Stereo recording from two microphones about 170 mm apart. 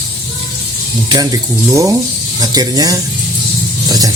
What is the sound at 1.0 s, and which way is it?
Speech, 20° right (ahead or behind).